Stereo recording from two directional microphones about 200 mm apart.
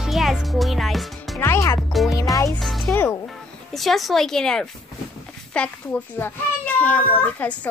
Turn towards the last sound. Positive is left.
turn(degrees=10)  # may be behind; listen again after turning